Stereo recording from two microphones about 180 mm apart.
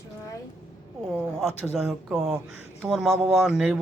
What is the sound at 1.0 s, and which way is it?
Speech, centre (ahead or behind).